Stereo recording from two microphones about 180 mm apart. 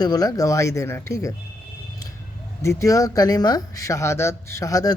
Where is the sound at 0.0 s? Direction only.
20° left (ahead or behind).